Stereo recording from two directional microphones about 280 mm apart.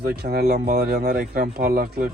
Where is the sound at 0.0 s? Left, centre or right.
Right.